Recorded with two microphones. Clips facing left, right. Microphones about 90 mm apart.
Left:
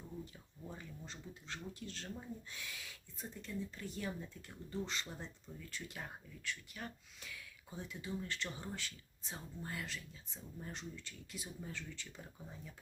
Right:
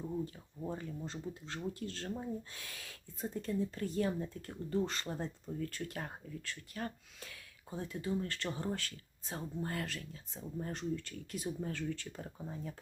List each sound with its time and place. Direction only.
0.7 s speech: 35° right (ahead or behind)